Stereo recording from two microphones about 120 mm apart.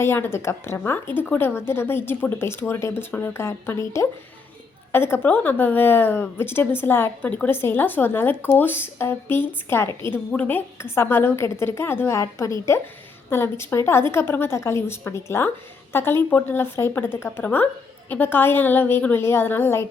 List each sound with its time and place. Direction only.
0.0 s speech: 20° left (ahead or behind)